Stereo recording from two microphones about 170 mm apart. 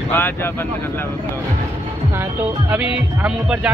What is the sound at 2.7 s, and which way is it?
Speech, 5° right (ahead or behind).